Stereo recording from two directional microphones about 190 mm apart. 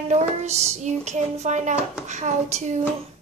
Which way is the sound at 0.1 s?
35° right (ahead or behind).